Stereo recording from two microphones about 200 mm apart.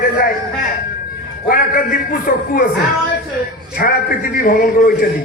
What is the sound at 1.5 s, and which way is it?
A man's voice, 45° left (ahead or behind).